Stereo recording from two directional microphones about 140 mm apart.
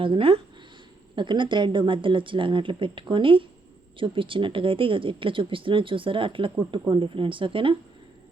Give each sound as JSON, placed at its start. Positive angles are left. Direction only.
{"t": 0.0, "sound": "speech", "side_deg": -40}